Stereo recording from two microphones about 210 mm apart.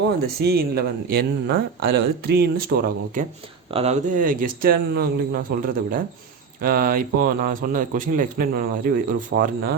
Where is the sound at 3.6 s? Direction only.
30° right (ahead or behind).